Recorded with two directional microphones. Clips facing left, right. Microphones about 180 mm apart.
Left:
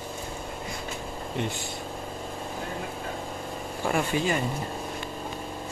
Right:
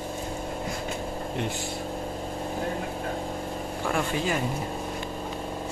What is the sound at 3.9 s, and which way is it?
Speech, centre (ahead or behind).